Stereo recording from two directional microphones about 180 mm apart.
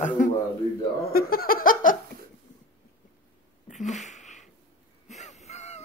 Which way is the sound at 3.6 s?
40° left (ahead or behind).